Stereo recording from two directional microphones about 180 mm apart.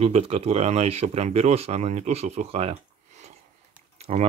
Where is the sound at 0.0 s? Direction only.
35° right (ahead or behind).